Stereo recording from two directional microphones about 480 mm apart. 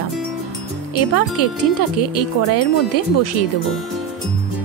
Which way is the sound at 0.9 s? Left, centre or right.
Left.